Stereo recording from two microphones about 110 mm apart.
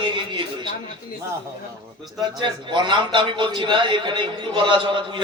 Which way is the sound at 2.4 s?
45° right (ahead or behind).